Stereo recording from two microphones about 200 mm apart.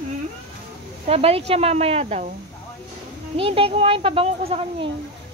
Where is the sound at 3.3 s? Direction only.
25° right (ahead or behind).